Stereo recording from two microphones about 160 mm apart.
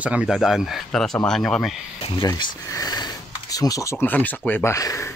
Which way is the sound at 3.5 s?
20° left (ahead or behind).